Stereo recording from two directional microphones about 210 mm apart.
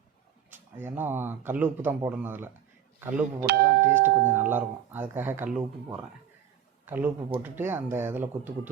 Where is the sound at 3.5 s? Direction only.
45° right (ahead or behind).